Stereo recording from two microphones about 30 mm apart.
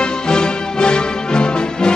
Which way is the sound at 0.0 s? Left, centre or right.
Left.